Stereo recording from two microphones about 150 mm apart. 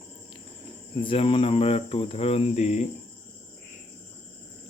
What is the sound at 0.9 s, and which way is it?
Speech, 35° left (ahead or behind).